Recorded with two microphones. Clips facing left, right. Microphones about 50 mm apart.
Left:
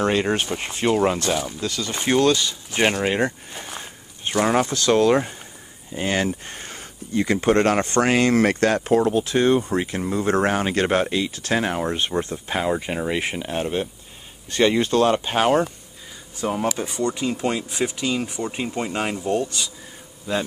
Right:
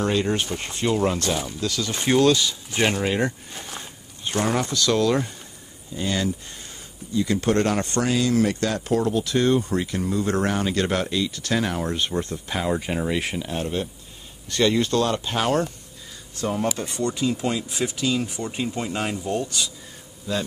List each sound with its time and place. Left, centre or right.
0.0 s speech: left
1.4 s speech: centre
3.3 s speech: centre
4.3 s speech: left
5.9 s speech: left
7.3 s speech: left
7.6 s speech: left
8.9 s speech: left
12.6 s speech: centre
13.4 s speech: left
16.3 s speech: centre
17.1 s speech: left